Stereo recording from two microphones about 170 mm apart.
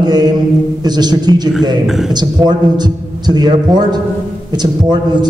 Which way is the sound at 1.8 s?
Centre (ahead or behind).